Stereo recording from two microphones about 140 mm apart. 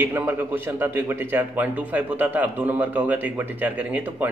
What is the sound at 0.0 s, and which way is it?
A man's voice, 15° right (ahead or behind).